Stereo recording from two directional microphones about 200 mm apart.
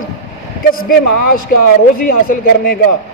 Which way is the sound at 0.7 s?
45° left (ahead or behind).